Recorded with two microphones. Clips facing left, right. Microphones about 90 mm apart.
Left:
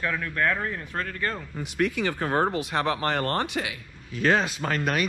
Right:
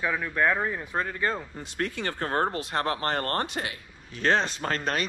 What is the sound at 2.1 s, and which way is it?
Speech, 10° left (ahead or behind).